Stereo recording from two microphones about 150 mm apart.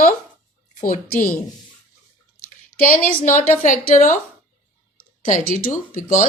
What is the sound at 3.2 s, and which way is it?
A woman's voice, 60° left (ahead or behind).